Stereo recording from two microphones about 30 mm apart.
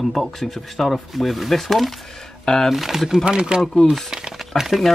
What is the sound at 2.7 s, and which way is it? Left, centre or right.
Speech, centre.